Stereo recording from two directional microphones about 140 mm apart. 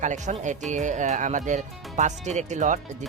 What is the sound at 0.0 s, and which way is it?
Speech, 60° right (ahead or behind).